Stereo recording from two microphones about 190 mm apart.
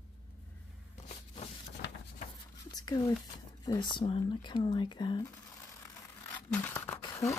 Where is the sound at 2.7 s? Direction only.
20° left (ahead or behind).